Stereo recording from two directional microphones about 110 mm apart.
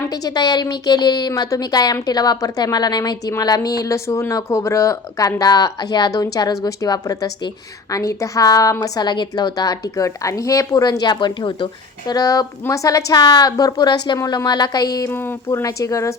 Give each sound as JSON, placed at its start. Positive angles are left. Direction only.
{"t": 0.1, "sound": "a woman's voice", "side_deg": 35}
{"t": 15.1, "sound": "speech", "side_deg": 20}
{"t": 15.6, "sound": "a woman's voice", "side_deg": 30}